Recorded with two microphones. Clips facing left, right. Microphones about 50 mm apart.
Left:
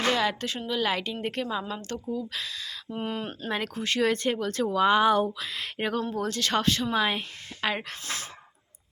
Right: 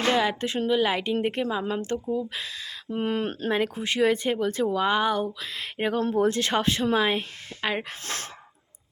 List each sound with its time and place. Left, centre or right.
0.1 s speech: centre
2.9 s speech: right
3.5 s speech: centre
6.1 s speech: right
6.9 s speech: centre
8.0 s speech: right